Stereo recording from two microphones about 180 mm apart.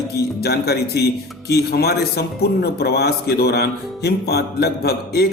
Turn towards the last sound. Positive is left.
turn(degrees=60)  # may be behind; listen again after turning